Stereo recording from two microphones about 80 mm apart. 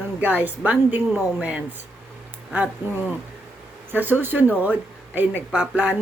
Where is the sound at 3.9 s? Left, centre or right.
Right.